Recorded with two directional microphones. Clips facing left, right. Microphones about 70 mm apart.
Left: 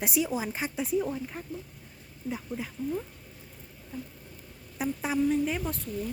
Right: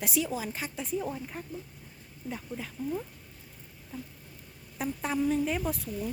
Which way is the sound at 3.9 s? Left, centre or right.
Centre.